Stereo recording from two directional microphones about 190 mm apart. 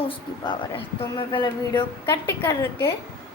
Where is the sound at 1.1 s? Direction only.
25° left (ahead or behind).